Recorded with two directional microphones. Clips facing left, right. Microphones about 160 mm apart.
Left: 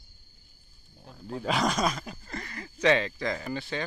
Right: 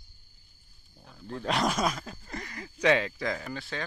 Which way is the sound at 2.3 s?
15° right (ahead or behind).